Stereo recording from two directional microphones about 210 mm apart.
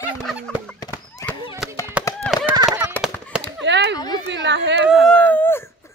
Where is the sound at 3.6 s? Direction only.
55° right (ahead or behind).